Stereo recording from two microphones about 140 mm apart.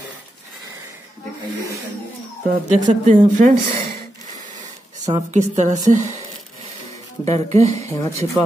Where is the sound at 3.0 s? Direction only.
60° right (ahead or behind).